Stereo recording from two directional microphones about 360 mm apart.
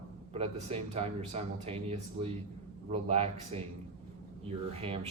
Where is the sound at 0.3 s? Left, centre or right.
Centre.